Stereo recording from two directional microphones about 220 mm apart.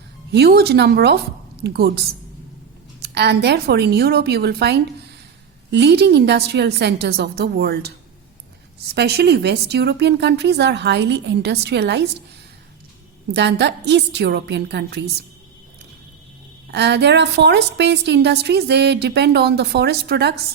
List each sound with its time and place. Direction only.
0.3 s a woman's voice: 50° right (ahead or behind)
9.0 s a woman's voice: 50° right (ahead or behind)
13.3 s a woman's voice: 50° right (ahead or behind)
16.7 s a woman's voice: 50° right (ahead or behind)